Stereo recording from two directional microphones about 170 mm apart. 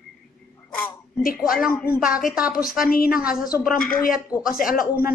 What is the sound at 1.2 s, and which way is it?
Speech, 55° left (ahead or behind).